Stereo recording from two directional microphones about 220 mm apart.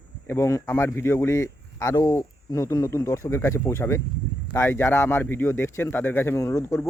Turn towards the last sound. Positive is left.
turn(degrees=10)  # may be behind; listen again after turning